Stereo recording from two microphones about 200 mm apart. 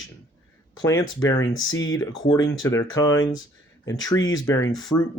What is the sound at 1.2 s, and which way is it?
Speech, 15° left (ahead or behind).